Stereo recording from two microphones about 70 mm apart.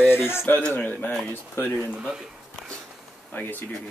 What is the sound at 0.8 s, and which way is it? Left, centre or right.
Speech, left.